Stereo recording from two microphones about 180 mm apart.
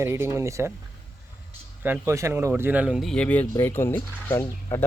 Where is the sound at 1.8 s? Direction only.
10° right (ahead or behind).